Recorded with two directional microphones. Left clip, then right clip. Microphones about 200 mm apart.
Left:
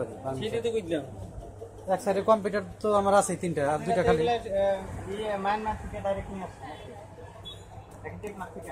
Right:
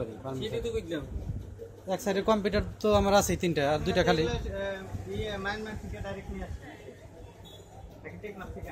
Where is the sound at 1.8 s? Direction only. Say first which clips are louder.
Left 4 dB; 35° right (ahead or behind).